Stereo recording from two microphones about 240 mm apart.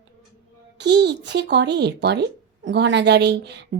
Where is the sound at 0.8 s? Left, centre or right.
Right.